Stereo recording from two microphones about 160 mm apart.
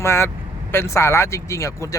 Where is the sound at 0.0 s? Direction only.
15° left (ahead or behind).